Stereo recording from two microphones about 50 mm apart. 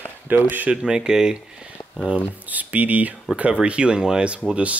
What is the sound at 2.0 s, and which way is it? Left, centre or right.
Speech, right.